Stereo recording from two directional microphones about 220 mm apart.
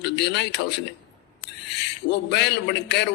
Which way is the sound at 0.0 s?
50° left (ahead or behind).